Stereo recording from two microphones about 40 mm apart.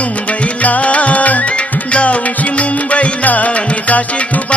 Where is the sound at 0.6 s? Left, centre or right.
Left.